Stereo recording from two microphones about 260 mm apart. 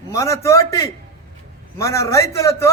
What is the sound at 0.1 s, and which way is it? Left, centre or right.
A man's voice, centre.